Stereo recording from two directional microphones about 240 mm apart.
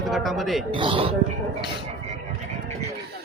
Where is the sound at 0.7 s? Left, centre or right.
Right.